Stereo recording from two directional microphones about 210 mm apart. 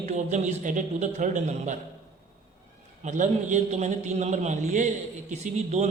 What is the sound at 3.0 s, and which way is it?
Speech, 35° right (ahead or behind).